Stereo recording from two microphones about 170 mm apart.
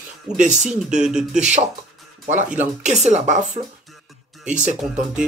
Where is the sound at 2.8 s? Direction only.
40° right (ahead or behind).